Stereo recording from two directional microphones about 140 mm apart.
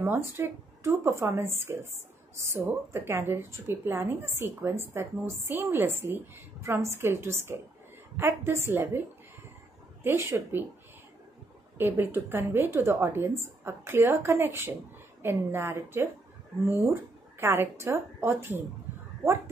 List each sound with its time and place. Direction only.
0.0 s a woman's voice: 15° right (ahead or behind)
10.0 s a woman's voice: 15° right (ahead or behind)
11.8 s a woman's voice: 15° right (ahead or behind)
17.4 s a woman's voice: 20° right (ahead or behind)